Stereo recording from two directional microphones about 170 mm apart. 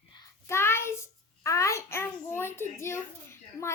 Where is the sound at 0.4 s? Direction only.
15° left (ahead or behind).